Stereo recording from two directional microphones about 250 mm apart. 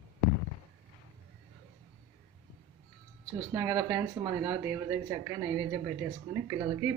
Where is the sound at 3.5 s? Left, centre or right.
Centre.